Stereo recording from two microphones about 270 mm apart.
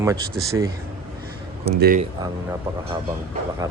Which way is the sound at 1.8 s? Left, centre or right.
Right.